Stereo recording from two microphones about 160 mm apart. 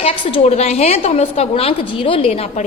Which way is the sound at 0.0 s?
35° left (ahead or behind).